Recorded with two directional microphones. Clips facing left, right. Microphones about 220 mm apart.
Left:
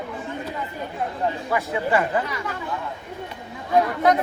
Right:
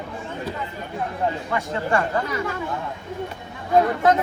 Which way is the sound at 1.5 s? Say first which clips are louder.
Left 1 dB; centre (ahead or behind).